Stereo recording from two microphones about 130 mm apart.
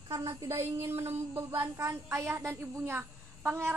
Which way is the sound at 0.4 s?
25° right (ahead or behind).